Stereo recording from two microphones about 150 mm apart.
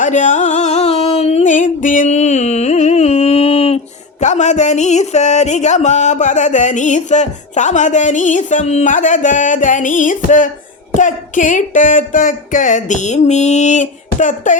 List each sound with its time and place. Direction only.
0.0 s music: 55° left (ahead or behind)
4.2 s speech: 50° left (ahead or behind)